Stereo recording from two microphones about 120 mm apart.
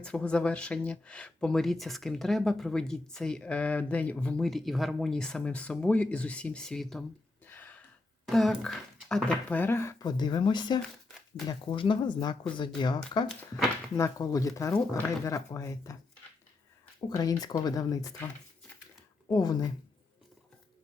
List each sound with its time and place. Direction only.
0.0 s speech: 10° left (ahead or behind)
7.4 s gasp: 15° left (ahead or behind)
8.3 s speech: 5° left (ahead or behind)
9.5 s speech: 15° left (ahead or behind)
10.0 s speech: 35° left (ahead or behind)
17.1 s speech: 35° left (ahead or behind)
19.3 s speech: 35° left (ahead or behind)